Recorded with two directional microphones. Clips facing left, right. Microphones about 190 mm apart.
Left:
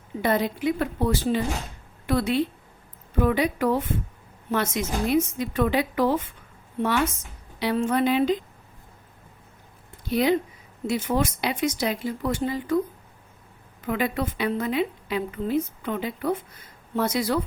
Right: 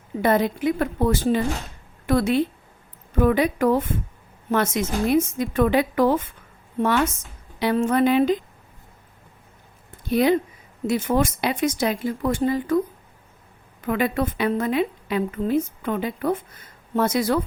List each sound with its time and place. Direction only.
0.2 s a woman's voice: 50° right (ahead or behind)
7.6 s a woman's voice: 50° right (ahead or behind)
10.1 s a woman's voice: 50° right (ahead or behind)
13.8 s a woman's voice: 50° right (ahead or behind)